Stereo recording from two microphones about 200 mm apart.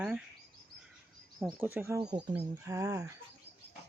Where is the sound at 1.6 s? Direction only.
10° right (ahead or behind).